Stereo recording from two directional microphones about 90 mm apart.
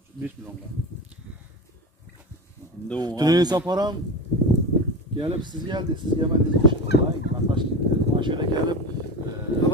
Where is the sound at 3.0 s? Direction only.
45° right (ahead or behind).